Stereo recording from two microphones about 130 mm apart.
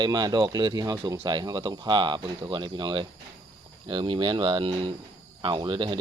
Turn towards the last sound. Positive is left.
turn(degrees=-35)  # may be behind; listen again after turning